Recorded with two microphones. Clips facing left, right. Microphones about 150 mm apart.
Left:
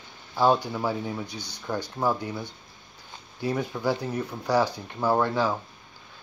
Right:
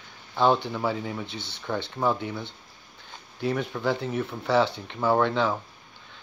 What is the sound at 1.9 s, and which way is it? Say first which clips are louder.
Speech: right 1 dB; 5° left (ahead or behind).